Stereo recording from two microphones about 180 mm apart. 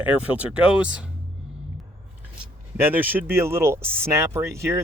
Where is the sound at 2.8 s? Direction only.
10° right (ahead or behind).